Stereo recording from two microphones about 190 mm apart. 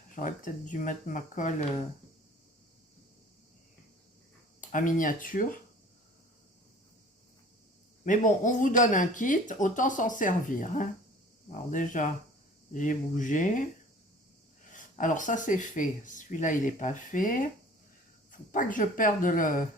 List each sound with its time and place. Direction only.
0.2 s speech: 45° left (ahead or behind)
4.6 s speech: 45° left (ahead or behind)
8.0 s speech: 45° left (ahead or behind)
14.7 s speech: 45° left (ahead or behind)